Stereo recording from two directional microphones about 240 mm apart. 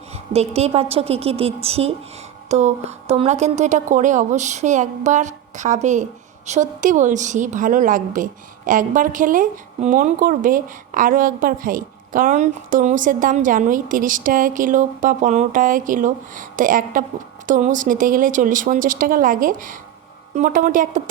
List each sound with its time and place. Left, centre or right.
0.1 s a woman's voice: right